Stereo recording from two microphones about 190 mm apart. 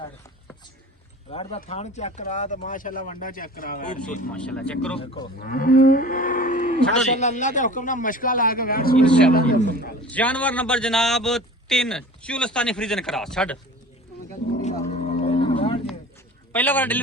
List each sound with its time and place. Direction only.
1.3 s speech: 30° left (ahead or behind)
4.3 s a man's voice: 5° left (ahead or behind)
4.9 s speech: 25° left (ahead or behind)
5.4 s livestock: 45° left (ahead or behind)
9.0 s a man's voice: 5° left (ahead or behind)
9.3 s livestock: 45° left (ahead or behind)
10.1 s a man's voice: 5° left (ahead or behind)
14.6 s cattle: 35° left (ahead or behind)
16.5 s a man's voice: 10° left (ahead or behind)